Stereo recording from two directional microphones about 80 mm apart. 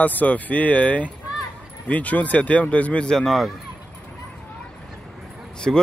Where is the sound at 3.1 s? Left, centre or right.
Centre.